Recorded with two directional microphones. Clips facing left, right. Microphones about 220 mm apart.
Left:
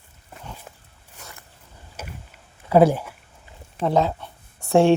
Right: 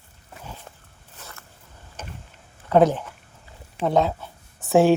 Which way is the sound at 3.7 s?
Centre (ahead or behind).